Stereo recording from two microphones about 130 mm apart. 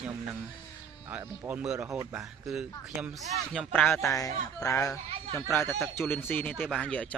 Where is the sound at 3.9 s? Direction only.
25° left (ahead or behind).